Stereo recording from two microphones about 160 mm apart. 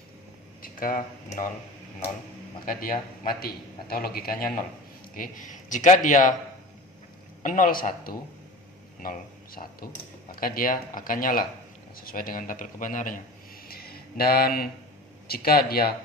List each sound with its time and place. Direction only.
0.6 s speech: 60° left (ahead or behind)
2.6 s a man's voice: 60° left (ahead or behind)
5.1 s a man's voice: 55° left (ahead or behind)
7.4 s speech: 60° left (ahead or behind)
13.7 s a man's voice: 70° left (ahead or behind)